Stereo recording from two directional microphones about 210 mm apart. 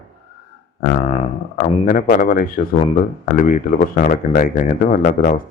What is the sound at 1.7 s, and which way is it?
Speech, 40° left (ahead or behind).